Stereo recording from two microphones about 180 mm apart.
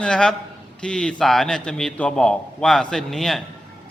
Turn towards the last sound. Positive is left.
turn(degrees=0)  # may be behind; listen again after turning